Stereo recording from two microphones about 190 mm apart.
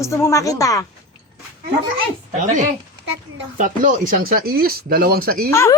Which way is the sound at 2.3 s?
40° right (ahead or behind).